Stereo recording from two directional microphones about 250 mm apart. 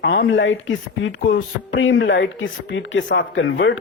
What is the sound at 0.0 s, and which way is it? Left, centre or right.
Speech, left.